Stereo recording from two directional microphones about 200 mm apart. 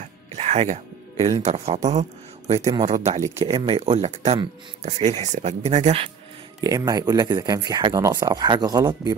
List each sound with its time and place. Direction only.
0.0 s music: 35° right (ahead or behind)
1.4 s speech: 35° right (ahead or behind)
6.6 s speech: 20° right (ahead or behind)